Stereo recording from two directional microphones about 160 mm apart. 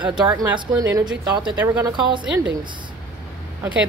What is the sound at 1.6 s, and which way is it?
Speech, 15° right (ahead or behind).